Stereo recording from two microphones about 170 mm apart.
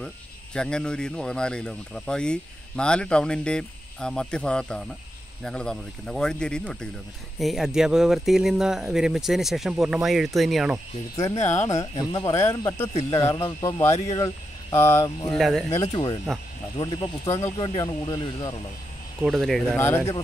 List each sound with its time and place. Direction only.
0.6 s speech: 5° left (ahead or behind)
11.5 s speech: 15° left (ahead or behind)
15.3 s speech: centre (ahead or behind)
15.9 s speech: 30° left (ahead or behind)
19.2 s speech: centre (ahead or behind)
19.8 s speech: 15° left (ahead or behind)